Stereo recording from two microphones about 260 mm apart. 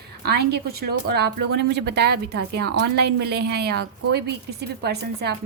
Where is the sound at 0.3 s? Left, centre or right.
Right.